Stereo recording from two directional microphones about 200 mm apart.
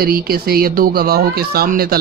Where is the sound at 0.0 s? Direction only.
50° right (ahead or behind).